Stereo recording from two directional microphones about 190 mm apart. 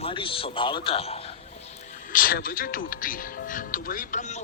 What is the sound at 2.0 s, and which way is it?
Speech, 50° left (ahead or behind).